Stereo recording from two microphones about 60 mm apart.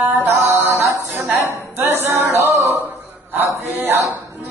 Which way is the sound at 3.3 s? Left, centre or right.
Right.